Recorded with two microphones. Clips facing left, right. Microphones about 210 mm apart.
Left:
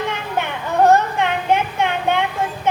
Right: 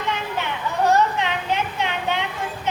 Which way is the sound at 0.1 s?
55° left (ahead or behind).